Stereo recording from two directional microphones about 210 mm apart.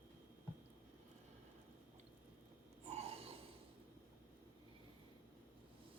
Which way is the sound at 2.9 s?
30° right (ahead or behind).